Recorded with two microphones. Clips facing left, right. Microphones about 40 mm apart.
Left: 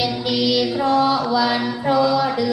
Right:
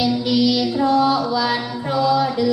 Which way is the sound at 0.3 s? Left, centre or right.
Centre.